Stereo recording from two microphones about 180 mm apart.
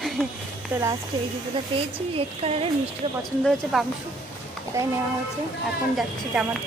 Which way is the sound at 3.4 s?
Centre (ahead or behind).